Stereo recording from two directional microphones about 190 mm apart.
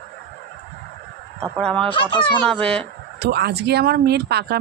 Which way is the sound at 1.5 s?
5° left (ahead or behind).